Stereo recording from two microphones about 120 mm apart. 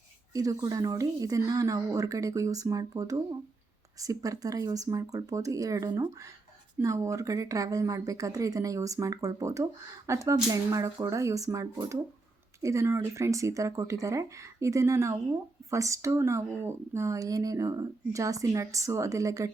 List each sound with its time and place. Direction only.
0.3 s speech: 30° right (ahead or behind)